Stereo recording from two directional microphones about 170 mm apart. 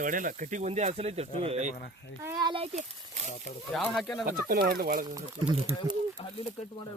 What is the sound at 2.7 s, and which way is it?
Speech, 45° right (ahead or behind).